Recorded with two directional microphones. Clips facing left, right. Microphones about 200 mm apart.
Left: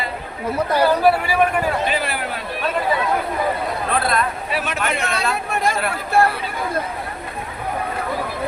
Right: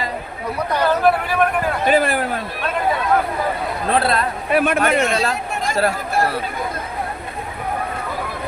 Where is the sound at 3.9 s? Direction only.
30° right (ahead or behind).